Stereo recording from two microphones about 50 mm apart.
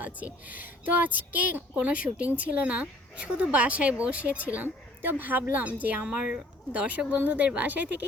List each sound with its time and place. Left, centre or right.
0.0 s a woman's voice: right
6.1 s a woman's voice: centre; by 8.0 s right